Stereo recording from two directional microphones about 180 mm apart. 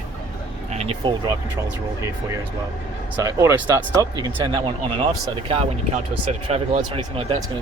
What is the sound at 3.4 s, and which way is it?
Speech, 15° right (ahead or behind).